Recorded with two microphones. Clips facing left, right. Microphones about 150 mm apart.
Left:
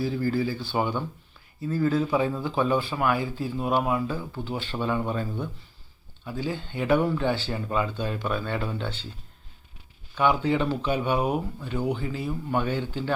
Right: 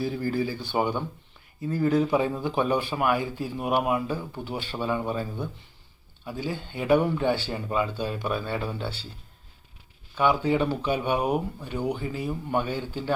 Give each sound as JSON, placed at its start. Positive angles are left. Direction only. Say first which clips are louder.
{"t": 0.0, "sound": "speech", "louder": "left 1 dB", "side_deg": -15}
{"t": 10.2, "sound": "speech", "louder": "even", "side_deg": -10}